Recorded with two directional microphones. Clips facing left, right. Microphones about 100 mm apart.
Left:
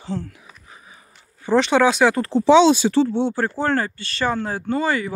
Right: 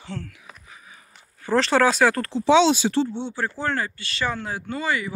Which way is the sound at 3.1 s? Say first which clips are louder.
Left 9 dB; 90° left.